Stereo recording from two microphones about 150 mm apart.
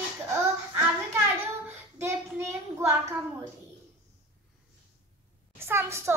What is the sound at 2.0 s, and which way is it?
Child singing, 15° right (ahead or behind).